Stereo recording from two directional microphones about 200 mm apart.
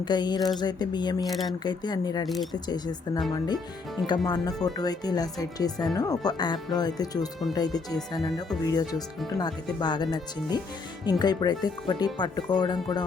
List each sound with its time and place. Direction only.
0.0 s speech: 20° left (ahead or behind)
2.2 s speech: centre (ahead or behind)
2.6 s speech: 20° left (ahead or behind)